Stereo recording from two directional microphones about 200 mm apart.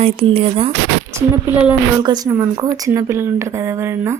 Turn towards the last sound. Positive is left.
turn(degrees=-10)  # may be behind; listen again after turning